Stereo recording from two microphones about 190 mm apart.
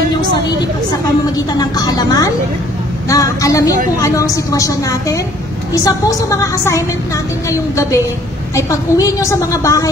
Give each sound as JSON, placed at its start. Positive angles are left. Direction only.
{"t": 1.3, "sound": "a woman's voice", "side_deg": 20}